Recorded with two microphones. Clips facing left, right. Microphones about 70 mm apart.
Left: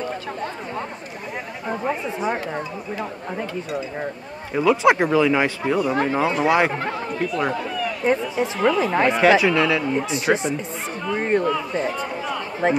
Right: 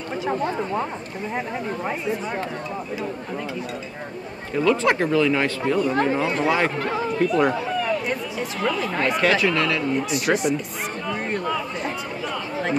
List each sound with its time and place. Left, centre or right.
4.6 s speech: centre
7.2 s speech: centre
8.9 s speech: left
10.0 s speech: left
11.1 s a sound: left
12.6 s speech: left